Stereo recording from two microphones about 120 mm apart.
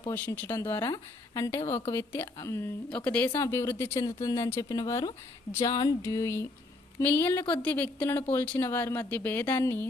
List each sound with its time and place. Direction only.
0.3 s speech: 20° left (ahead or behind)
0.9 s speech: 35° left (ahead or behind)
2.9 s speech: 10° left (ahead or behind); by 5.1 s 30° left (ahead or behind)
5.5 s a sound: 35° left (ahead or behind)
6.0 s speech: 25° left (ahead or behind)